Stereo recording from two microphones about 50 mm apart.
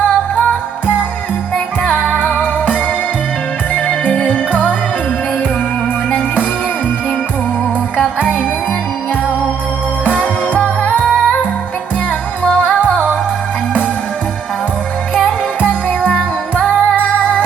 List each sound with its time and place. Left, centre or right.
1.5 s music: left
3.8 s music: left
6.1 s music: left
10.0 s music: left
12.4 s music: left
15.9 s music: left